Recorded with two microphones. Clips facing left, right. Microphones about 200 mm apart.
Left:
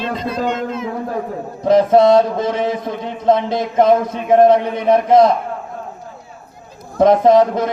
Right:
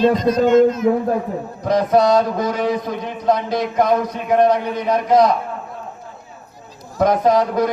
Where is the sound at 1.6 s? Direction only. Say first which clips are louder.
Left 4 dB; 25° left (ahead or behind).